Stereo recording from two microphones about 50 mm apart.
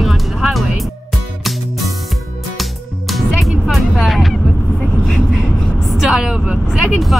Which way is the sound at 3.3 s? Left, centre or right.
Centre.